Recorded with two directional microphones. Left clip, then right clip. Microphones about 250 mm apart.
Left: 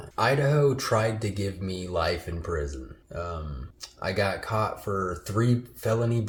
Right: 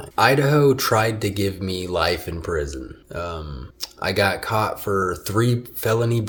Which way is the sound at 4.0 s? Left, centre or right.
Right.